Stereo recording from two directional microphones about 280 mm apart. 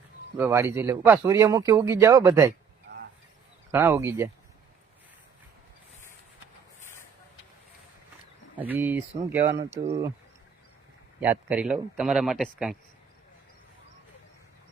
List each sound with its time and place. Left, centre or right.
0.3 s speech: centre
3.7 s speech: centre
8.5 s speech: centre
11.2 s speech: centre